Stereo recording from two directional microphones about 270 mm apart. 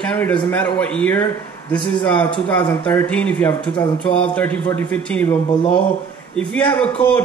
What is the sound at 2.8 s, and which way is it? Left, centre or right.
Speech, centre.